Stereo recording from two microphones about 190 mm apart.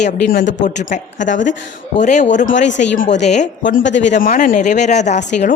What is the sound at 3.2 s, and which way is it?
Speech, 40° left (ahead or behind).